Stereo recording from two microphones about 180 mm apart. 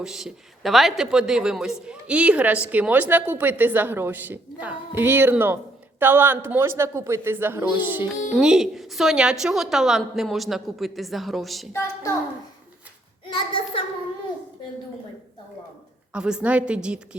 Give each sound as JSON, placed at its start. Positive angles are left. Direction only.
{"t": 0.0, "sound": "a woman's voice", "side_deg": 0}
{"t": 11.7, "sound": "a child's voice", "side_deg": 15}
{"t": 13.3, "sound": "a sound", "side_deg": 30}
{"t": 16.1, "sound": "a woman's voice", "side_deg": -5}